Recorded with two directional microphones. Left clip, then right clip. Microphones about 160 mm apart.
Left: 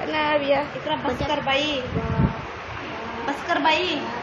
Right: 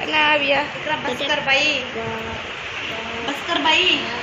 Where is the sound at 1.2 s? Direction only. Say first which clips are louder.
Right 6 dB; 60° left (ahead or behind).